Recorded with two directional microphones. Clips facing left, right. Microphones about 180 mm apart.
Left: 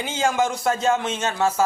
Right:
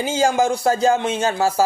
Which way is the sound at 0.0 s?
35° right (ahead or behind).